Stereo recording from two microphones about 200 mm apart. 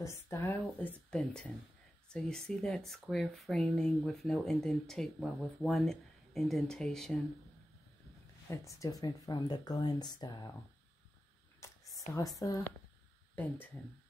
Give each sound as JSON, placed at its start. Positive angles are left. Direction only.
{"t": 0.0, "sound": "a woman's voice", "side_deg": 15}
{"t": 8.5, "sound": "speech", "side_deg": 15}
{"t": 11.6, "sound": "a sound", "side_deg": 15}
{"t": 12.1, "sound": "a woman's voice", "side_deg": 15}